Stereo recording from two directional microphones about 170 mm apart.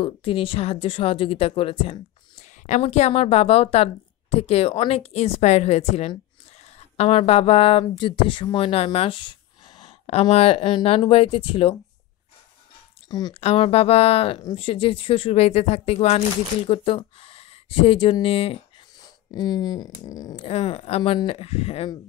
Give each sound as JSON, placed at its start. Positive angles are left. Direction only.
{"t": 0.0, "sound": "speech", "side_deg": 30}
{"t": 9.8, "sound": "a sound", "side_deg": 40}
{"t": 10.3, "sound": "speech", "side_deg": 35}
{"t": 13.3, "sound": "speech", "side_deg": 35}
{"t": 20.4, "sound": "speech", "side_deg": 35}